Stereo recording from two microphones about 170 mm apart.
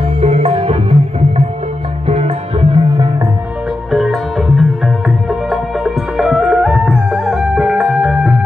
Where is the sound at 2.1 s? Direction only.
35° right (ahead or behind).